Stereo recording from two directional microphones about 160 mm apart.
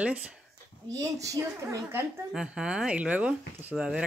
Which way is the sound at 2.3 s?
5° right (ahead or behind).